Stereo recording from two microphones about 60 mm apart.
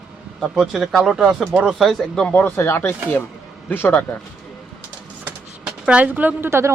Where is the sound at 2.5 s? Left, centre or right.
Left.